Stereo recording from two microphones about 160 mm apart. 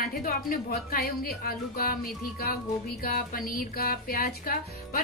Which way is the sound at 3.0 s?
65° left (ahead or behind).